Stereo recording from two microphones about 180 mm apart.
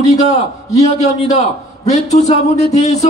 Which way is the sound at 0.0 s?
40° left (ahead or behind).